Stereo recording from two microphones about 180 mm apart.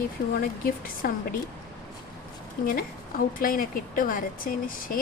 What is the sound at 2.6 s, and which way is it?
A woman's voice, 55° left (ahead or behind).